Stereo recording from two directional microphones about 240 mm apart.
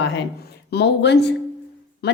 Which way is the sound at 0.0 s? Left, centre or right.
Left.